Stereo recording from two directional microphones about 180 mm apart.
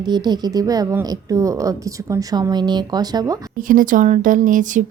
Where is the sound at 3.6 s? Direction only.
50° right (ahead or behind).